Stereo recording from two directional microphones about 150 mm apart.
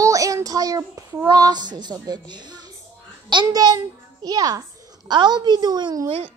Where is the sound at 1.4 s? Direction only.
25° right (ahead or behind).